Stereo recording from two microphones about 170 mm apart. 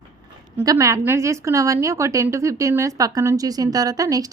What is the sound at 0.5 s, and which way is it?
A woman's voice, 20° right (ahead or behind).